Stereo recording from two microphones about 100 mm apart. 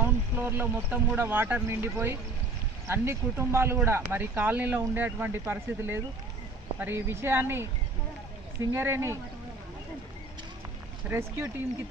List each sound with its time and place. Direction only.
0.0 s speech: 20° right (ahead or behind)
8.7 s speech: 25° right (ahead or behind)
11.1 s speech: 20° right (ahead or behind)